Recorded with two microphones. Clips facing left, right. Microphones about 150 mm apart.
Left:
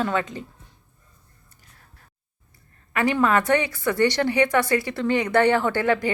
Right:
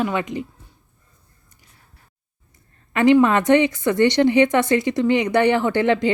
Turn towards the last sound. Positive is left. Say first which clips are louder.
# right 4 dB
turn(degrees=-20)  # may be behind; listen again after turning